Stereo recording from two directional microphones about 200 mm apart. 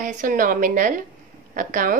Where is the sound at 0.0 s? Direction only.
40° right (ahead or behind).